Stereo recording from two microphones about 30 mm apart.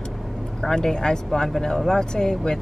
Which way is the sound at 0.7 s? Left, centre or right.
Centre.